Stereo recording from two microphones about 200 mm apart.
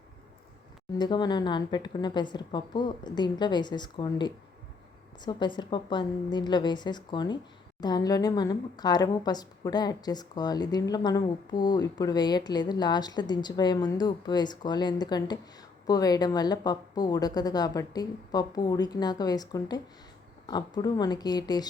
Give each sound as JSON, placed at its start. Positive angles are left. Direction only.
{"t": 0.9, "sound": "a woman's voice", "side_deg": 20}